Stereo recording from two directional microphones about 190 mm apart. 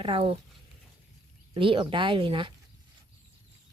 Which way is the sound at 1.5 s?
25° right (ahead or behind).